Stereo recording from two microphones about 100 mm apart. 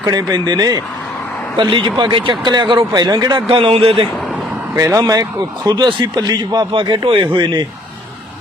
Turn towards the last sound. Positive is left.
turn(degrees=-55)  # may be behind; listen again after turning